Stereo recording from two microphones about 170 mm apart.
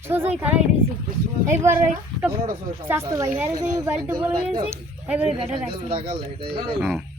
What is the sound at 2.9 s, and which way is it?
A woman's voice, 15° right (ahead or behind).